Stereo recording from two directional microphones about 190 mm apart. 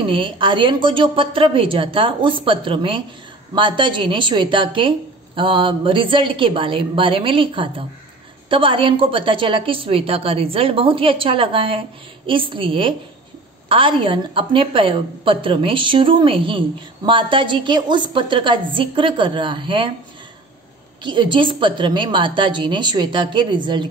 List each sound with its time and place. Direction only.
0.1 s a woman's voice: 25° right (ahead or behind)
21.0 s a woman's voice: 25° right (ahead or behind)